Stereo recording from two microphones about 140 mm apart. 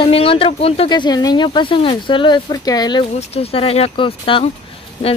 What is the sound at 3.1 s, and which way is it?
Speech, 45° left (ahead or behind).